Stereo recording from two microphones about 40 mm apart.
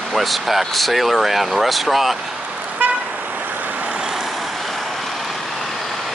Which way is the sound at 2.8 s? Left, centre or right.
Right.